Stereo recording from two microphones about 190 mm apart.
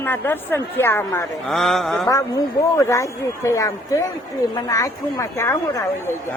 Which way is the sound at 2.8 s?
15° left (ahead or behind).